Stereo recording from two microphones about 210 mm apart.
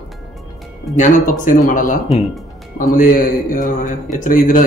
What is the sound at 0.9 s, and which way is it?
Speech, 40° left (ahead or behind).